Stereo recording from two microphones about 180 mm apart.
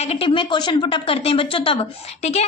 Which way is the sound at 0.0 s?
35° left (ahead or behind).